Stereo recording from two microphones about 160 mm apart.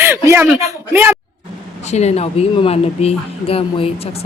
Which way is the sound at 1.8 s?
45° left (ahead or behind).